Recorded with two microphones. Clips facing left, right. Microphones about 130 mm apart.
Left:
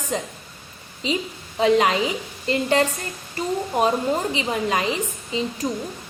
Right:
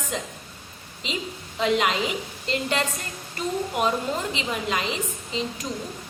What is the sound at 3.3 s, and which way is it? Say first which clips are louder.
A woman's voice: left 3 dB; 35° left (ahead or behind).